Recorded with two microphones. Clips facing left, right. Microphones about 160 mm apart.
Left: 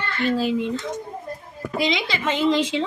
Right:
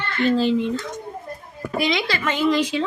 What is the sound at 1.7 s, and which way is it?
Speech, 20° left (ahead or behind).